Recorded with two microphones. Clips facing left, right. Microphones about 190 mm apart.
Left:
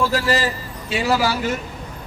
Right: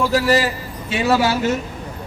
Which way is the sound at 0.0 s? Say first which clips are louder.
Right 3 dB; 15° right (ahead or behind).